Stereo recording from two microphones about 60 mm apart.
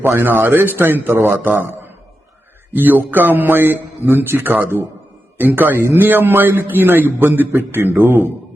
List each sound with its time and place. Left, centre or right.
0.0 s a man's voice: right